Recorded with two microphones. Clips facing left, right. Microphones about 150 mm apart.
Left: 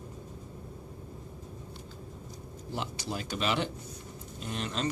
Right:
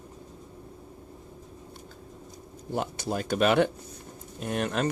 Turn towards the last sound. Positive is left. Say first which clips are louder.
# right 6 dB
turn(degrees=-55)  # may be behind; listen again after turning